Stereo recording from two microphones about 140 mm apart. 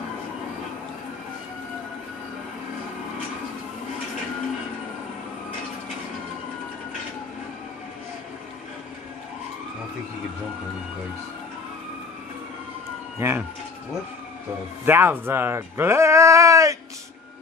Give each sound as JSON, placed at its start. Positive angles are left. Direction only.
{"t": 13.2, "sound": "speech", "side_deg": -15}
{"t": 14.9, "sound": "speech", "side_deg": -15}